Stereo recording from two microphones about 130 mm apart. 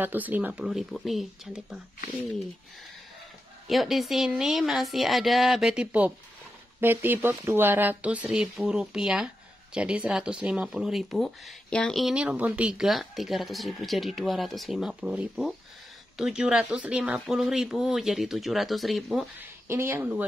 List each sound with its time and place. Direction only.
0.0 s speech: 15° right (ahead or behind)
3.6 s speech: centre (ahead or behind)
19.7 s speech: 15° right (ahead or behind)